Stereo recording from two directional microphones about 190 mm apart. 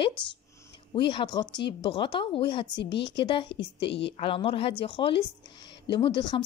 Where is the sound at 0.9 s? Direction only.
25° left (ahead or behind).